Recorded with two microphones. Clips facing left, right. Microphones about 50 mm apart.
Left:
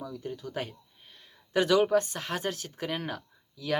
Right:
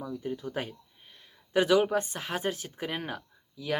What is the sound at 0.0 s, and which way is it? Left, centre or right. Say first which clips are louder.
Speech: right 3 dB; centre.